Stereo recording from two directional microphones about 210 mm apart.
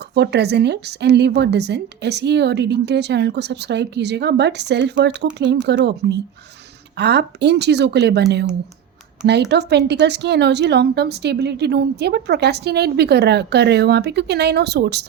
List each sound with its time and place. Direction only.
0.1 s a woman's voice: 50° right (ahead or behind)